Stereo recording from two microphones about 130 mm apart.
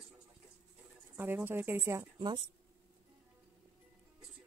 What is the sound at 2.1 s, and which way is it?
Speech, 35° right (ahead or behind).